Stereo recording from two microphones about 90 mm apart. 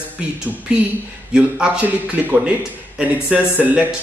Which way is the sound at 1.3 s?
10° right (ahead or behind).